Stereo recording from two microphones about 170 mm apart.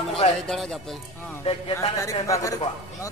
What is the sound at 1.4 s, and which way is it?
Speech, 35° left (ahead or behind).